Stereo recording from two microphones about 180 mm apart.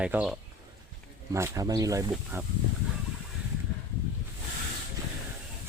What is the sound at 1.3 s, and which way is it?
Speech, 15° right (ahead or behind).